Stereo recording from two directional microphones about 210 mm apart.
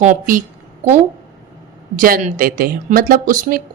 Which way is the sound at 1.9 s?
40° right (ahead or behind).